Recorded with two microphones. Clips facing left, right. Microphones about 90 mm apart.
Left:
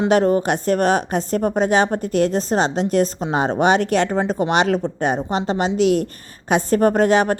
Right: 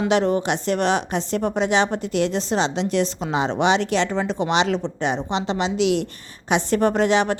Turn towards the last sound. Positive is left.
turn(degrees=45)  # may be behind; listen again after turning